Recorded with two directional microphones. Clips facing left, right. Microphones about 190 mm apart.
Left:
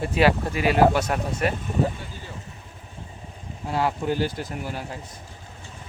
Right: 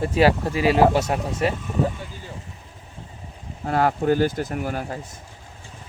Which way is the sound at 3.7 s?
50° right (ahead or behind).